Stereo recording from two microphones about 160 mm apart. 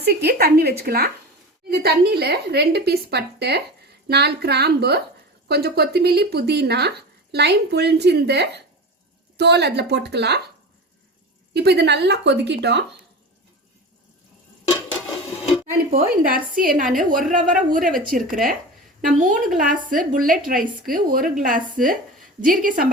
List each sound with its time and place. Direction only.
0.0 s a woman's voice: 85° right
11.5 s speech: 90° right
15.9 s a woman's voice: 65° right (ahead or behind)